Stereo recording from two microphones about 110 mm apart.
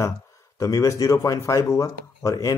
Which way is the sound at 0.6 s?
30° left (ahead or behind).